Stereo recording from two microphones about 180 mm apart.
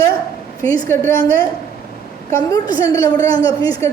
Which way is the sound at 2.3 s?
20° left (ahead or behind).